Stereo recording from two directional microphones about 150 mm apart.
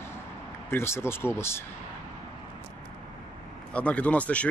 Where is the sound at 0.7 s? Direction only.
15° left (ahead or behind).